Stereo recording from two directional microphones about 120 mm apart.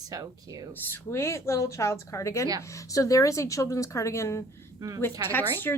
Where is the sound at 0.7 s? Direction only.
20° left (ahead or behind).